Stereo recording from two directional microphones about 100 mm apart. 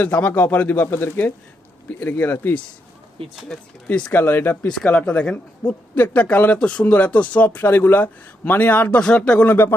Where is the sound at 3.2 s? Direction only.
65° right (ahead or behind).